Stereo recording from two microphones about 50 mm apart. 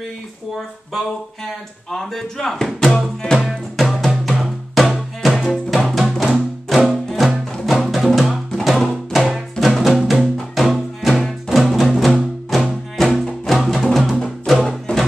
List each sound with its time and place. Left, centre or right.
1.9 s speech: centre
3.4 s music: centre
14.9 s music: left